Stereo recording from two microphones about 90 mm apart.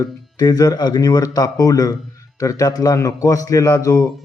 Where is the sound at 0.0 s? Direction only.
45° left (ahead or behind).